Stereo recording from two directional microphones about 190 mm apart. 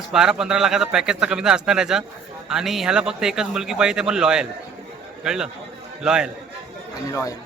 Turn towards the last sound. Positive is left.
turn(degrees=15)  # may be behind; listen again after turning